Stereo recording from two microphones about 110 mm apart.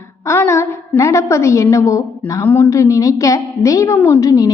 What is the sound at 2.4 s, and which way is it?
Speech, 15° left (ahead or behind).